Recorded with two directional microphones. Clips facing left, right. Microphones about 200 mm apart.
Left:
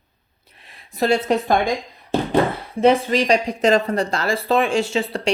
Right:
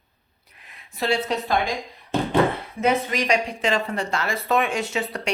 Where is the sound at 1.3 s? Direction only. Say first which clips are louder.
Left 7 dB; 50° left (ahead or behind).